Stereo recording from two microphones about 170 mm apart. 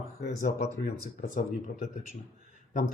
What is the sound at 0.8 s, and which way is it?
Speech, 60° left (ahead or behind).